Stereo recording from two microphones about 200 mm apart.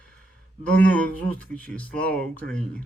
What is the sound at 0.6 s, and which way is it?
Speech, 10° left (ahead or behind).